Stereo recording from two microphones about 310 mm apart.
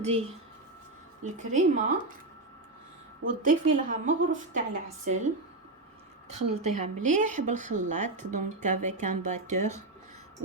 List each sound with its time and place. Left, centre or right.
0.0 s speech: centre
1.4 s speech: right
3.2 s speech: right
6.3 s speech: right
9.5 s speech: right